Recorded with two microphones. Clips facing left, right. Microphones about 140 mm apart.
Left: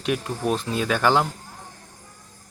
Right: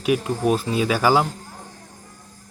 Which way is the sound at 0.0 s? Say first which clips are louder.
Right 5 dB; 5° right (ahead or behind).